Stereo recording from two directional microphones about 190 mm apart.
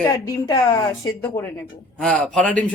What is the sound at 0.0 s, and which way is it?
A woman's voice, 20° left (ahead or behind).